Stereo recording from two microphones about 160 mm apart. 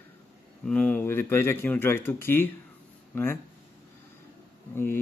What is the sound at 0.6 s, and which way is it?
Speech, 5° left (ahead or behind).